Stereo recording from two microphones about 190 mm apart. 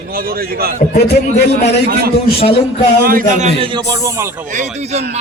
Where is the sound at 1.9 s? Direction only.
55° right (ahead or behind); by 3.7 s 40° right (ahead or behind).